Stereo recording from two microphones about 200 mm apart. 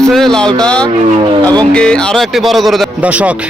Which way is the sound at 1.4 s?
20° right (ahead or behind).